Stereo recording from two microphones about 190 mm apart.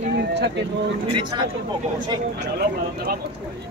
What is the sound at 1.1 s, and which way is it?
Speech, 25° right (ahead or behind).